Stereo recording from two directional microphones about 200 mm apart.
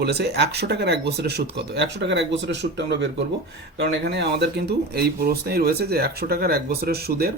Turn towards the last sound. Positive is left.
turn(degrees=-50)  # may be behind; listen again after turning